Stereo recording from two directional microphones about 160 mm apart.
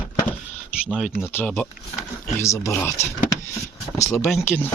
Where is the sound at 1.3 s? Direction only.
10° left (ahead or behind).